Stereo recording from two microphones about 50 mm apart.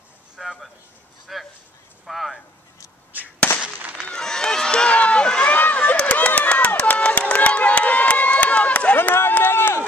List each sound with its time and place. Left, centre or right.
0.4 s a sound: centre
1.2 s speech: centre
3.9 s run: centre
5.6 s a sound: left
5.9 s run: left
8.9 s run: left